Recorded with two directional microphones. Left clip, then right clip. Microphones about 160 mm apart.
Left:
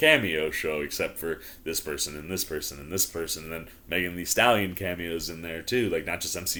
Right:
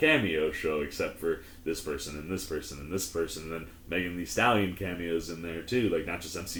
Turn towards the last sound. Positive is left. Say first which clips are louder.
# left 2 dB
turn(degrees=20)  # may be behind; listen again after turning